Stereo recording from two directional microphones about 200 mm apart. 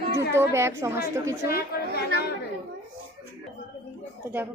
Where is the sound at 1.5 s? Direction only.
50° left (ahead or behind).